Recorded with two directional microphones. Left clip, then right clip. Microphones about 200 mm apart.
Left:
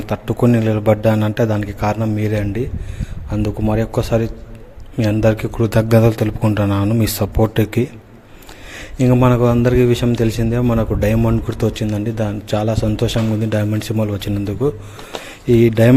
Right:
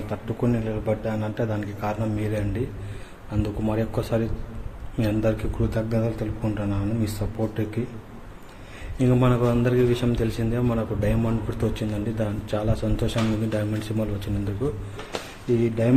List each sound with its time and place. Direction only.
0.1 s a man's voice: 50° left (ahead or behind)
9.0 s a man's voice: 40° left (ahead or behind)
15.6 s speech: 55° left (ahead or behind)